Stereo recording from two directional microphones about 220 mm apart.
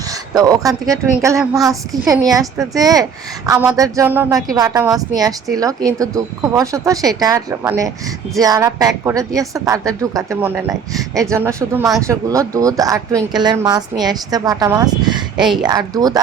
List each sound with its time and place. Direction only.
0.1 s a woman's voice: 15° right (ahead or behind)